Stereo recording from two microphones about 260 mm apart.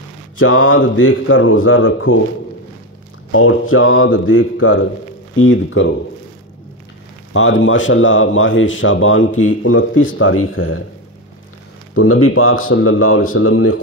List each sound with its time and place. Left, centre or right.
0.4 s speech: left
3.3 s speech: left
7.3 s speech: left
11.9 s speech: left